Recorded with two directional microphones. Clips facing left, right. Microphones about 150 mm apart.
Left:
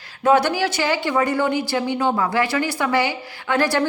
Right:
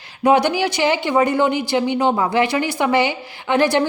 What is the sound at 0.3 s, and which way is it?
Speech, 15° right (ahead or behind).